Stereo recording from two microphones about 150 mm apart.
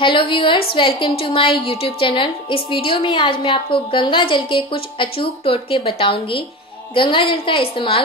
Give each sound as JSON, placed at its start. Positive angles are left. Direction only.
{"t": 0.0, "sound": "a woman's voice", "side_deg": 35}